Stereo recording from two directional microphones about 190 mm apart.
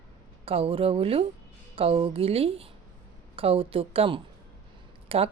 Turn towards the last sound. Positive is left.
turn(degrees=-30)  # may be behind; listen again after turning